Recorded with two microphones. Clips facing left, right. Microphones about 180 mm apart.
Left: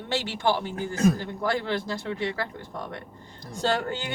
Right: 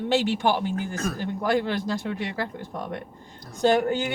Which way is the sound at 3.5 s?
15° right (ahead or behind).